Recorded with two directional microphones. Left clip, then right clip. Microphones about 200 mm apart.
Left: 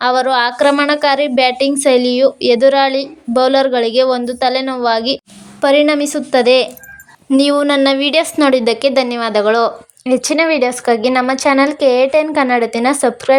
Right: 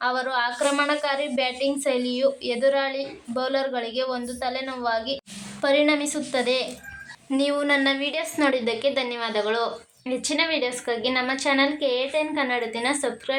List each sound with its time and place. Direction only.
0.0 s a woman's voice: 40° left (ahead or behind)